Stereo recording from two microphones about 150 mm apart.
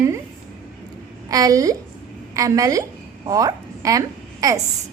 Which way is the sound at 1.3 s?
25° right (ahead or behind).